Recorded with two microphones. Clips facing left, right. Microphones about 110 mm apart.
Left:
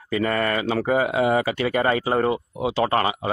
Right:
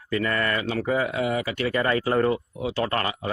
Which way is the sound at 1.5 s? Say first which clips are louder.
Left 3 dB; 20° left (ahead or behind).